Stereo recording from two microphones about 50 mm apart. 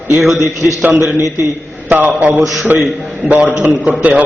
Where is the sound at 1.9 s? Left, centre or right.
Right.